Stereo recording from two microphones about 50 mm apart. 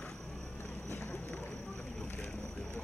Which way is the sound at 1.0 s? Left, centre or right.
Centre.